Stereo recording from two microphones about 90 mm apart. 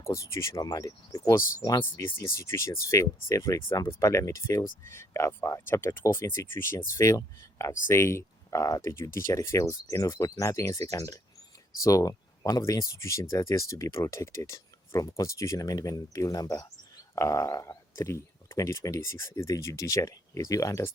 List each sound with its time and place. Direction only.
0.0 s speech: 30° left (ahead or behind)
0.6 s speech: 40° left (ahead or behind)